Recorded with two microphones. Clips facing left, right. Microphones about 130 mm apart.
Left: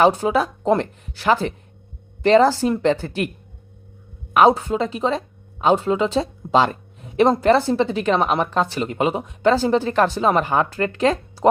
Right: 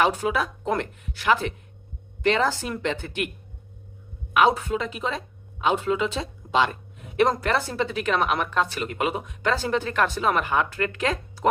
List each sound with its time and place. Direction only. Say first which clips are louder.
0.0 s speech: left 6 dB; 30° left (ahead or behind)
4.4 s speech: left 5 dB; 35° left (ahead or behind)